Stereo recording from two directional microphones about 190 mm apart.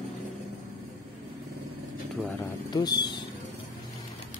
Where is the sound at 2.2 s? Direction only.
20° left (ahead or behind).